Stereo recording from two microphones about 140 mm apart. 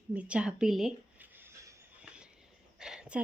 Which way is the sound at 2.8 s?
5° right (ahead or behind).